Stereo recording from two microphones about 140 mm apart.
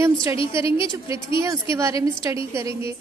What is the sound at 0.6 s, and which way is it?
Speech, 40° left (ahead or behind).